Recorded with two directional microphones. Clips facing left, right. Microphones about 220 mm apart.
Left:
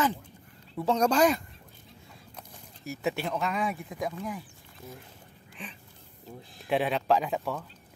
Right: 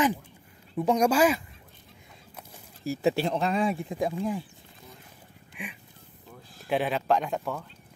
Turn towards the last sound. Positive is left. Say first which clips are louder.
# even
turn(degrees=0)  # may be behind; listen again after turning